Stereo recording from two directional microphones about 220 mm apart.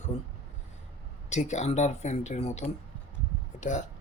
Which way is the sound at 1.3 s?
30° left (ahead or behind).